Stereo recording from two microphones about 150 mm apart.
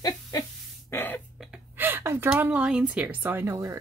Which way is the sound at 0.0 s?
25° left (ahead or behind).